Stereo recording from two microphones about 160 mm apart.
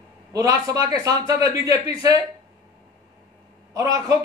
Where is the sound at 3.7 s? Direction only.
20° right (ahead or behind).